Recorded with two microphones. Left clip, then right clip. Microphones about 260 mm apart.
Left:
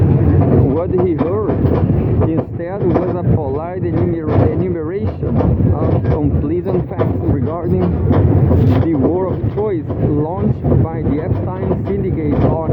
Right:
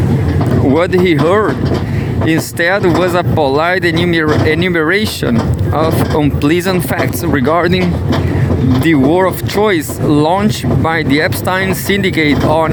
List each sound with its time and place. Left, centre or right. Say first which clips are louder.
0.8 s speech: right 5 dB; right
6.4 s speech: right 5 dB; right
8.9 s speech: right 9 dB; right
10.8 s speech: right 8 dB; right